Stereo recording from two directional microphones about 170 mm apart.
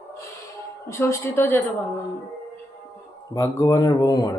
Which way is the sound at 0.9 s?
15° left (ahead or behind).